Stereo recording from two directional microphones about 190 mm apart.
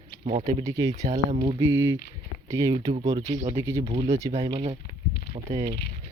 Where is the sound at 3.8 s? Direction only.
30° right (ahead or behind).